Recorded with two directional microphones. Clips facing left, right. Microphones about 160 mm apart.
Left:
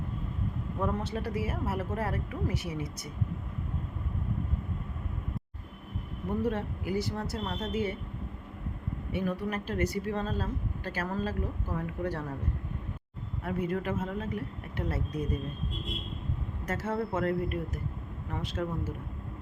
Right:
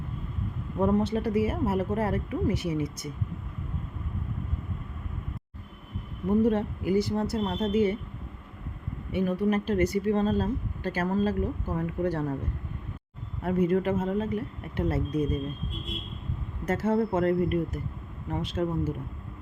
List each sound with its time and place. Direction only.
0.8 s speech: 25° right (ahead or behind)
6.4 s speech: 25° right (ahead or behind)
9.1 s speech: 20° right (ahead or behind)
13.4 s speech: 30° right (ahead or behind)
16.6 s speech: 25° right (ahead or behind)